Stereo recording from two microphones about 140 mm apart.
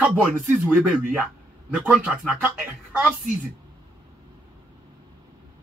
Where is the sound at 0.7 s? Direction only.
5° right (ahead or behind).